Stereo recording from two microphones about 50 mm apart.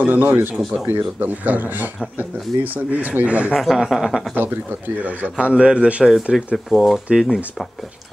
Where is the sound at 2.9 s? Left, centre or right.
Right.